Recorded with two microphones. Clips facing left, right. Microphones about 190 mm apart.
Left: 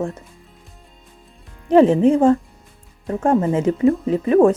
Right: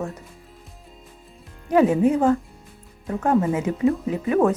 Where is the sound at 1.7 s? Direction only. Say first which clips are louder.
Left 5 dB; 30° left (ahead or behind).